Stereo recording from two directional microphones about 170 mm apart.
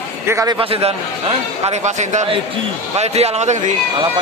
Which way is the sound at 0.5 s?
35° right (ahead or behind).